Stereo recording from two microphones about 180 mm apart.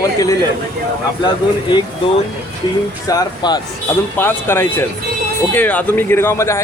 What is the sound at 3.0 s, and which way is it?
Speech, 20° left (ahead or behind).